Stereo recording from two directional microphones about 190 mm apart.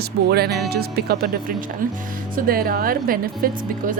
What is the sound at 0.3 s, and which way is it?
Speech, 55° right (ahead or behind).